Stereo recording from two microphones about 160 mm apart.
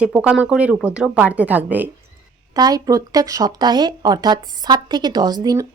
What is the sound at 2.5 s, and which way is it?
Speech, 25° right (ahead or behind).